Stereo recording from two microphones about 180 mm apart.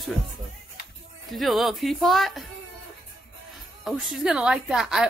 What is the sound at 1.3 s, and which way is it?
Speech, centre (ahead or behind).